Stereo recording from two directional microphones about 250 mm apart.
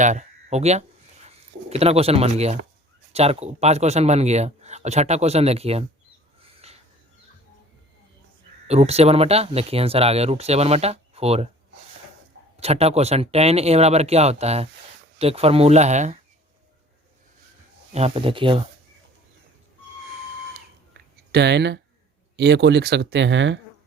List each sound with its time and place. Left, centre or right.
0.0 s speech: right
6.4 s a sound: right
8.6 s speech: right
12.5 s speech: right
17.9 s speech: right
21.3 s speech: right